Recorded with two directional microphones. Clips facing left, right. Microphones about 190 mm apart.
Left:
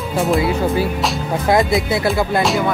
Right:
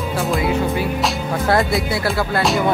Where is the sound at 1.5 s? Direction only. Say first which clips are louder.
Left 3 dB; 20° left (ahead or behind).